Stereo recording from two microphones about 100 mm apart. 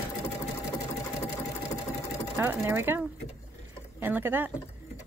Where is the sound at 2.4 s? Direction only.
25° right (ahead or behind).